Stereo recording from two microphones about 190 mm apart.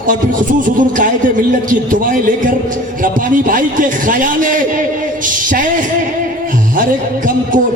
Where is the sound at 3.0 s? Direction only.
45° right (ahead or behind).